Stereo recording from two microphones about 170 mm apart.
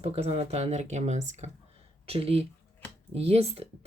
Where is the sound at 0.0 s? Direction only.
35° right (ahead or behind).